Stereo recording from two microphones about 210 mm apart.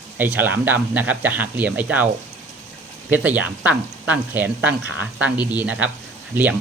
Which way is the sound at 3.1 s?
5° right (ahead or behind).